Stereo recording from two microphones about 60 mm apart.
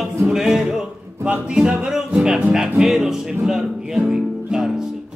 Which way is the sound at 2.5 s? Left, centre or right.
Centre.